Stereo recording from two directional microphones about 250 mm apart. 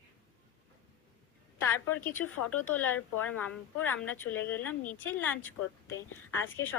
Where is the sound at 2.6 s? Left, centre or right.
Centre.